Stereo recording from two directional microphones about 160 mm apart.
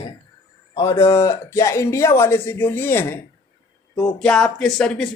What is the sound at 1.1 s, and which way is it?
Speech, 15° left (ahead or behind).